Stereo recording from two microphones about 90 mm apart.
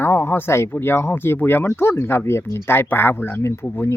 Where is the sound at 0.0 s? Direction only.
30° left (ahead or behind).